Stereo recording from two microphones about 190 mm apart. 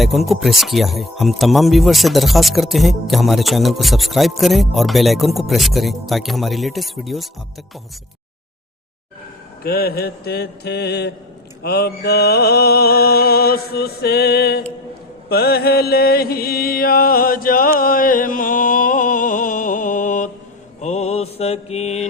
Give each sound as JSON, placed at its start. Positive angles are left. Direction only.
{"t": 0.0, "sound": "speech", "side_deg": 0}
{"t": 9.6, "sound": "music", "side_deg": 55}
{"t": 15.3, "sound": "mantra", "side_deg": 55}